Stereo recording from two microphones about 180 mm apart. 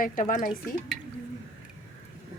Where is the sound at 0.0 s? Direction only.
45° left (ahead or behind).